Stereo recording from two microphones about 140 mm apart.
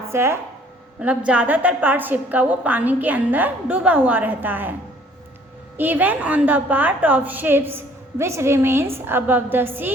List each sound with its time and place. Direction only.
0.1 s a woman's voice: 20° right (ahead or behind)
5.7 s a woman's voice: 15° right (ahead or behind)